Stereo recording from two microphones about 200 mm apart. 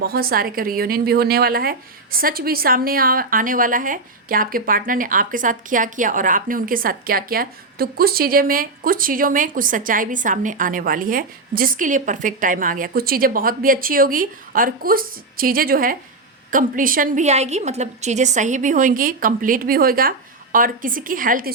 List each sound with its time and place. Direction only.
0.0 s a woman's voice: 50° right (ahead or behind)